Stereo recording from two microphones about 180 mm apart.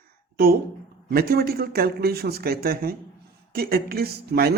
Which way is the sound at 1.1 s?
60° right (ahead or behind).